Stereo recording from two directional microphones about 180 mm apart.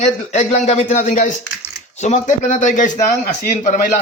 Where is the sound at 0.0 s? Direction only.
40° left (ahead or behind).